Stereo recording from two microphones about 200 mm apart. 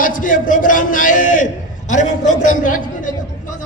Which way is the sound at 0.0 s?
40° left (ahead or behind).